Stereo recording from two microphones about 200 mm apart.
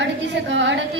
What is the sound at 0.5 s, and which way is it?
Speech, 65° right (ahead or behind).